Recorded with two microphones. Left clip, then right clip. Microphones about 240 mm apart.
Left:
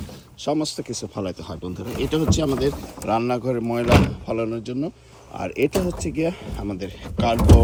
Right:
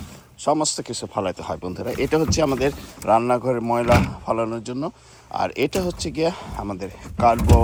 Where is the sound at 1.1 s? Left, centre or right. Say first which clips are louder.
Right 5 dB; right.